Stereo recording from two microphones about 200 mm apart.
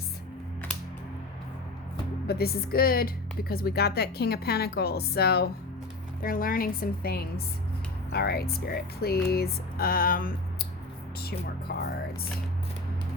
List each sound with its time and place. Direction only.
2.2 s speech: 50° left (ahead or behind)